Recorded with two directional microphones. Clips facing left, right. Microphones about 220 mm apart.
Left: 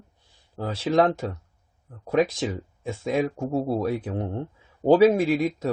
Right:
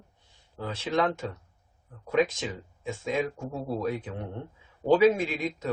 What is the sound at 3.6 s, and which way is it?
Speech, 35° left (ahead or behind).